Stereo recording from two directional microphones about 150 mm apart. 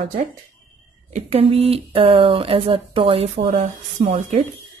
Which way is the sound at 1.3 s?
40° right (ahead or behind).